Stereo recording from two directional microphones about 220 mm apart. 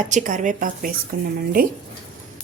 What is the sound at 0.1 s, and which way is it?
A woman's voice, 35° right (ahead or behind).